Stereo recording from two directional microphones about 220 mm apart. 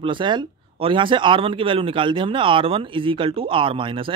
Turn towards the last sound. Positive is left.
turn(degrees=-25)  # may be behind; listen again after turning